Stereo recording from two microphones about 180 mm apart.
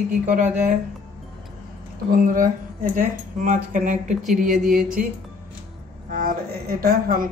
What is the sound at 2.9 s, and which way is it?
A man's voice, 45° right (ahead or behind).